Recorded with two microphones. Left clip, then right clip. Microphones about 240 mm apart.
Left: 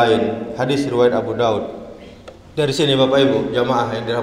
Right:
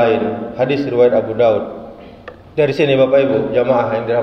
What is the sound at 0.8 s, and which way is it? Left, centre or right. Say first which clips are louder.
Speech: right 3 dB; left.